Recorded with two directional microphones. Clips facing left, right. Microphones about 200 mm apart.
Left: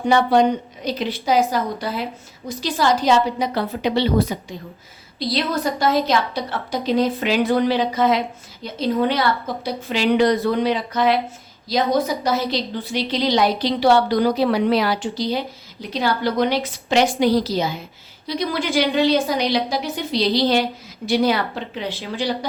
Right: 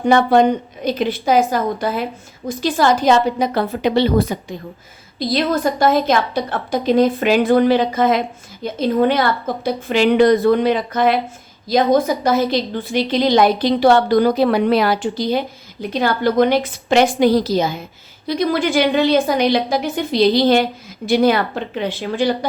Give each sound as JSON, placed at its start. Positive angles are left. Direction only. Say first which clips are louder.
{"t": 0.0, "sound": "a woman's voice", "louder": "right 3 dB", "side_deg": -50}